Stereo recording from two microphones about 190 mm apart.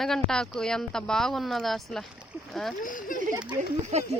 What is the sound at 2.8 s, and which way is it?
Speech, 45° left (ahead or behind).